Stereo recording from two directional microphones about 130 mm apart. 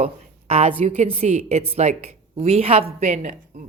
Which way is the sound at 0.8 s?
55° right (ahead or behind).